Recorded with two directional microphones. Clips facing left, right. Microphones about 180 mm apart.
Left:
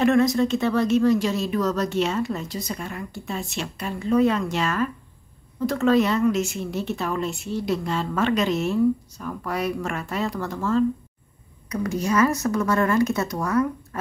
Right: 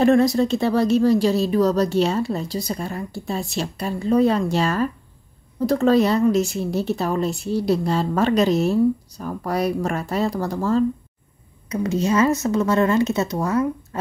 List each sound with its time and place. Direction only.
0.0 s a woman's voice: 35° right (ahead or behind)
11.7 s speech: 25° right (ahead or behind)